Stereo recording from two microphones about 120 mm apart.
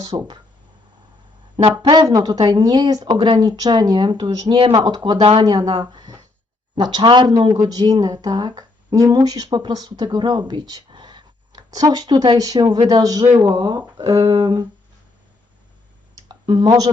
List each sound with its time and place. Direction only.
0.1 s speech: 35° right (ahead or behind)
1.6 s speech: 45° right (ahead or behind)
1.9 s speech: 35° right (ahead or behind)
5.6 s a sound: 35° right (ahead or behind)
6.7 s speech: 40° right (ahead or behind)
16.3 s speech: 40° right (ahead or behind)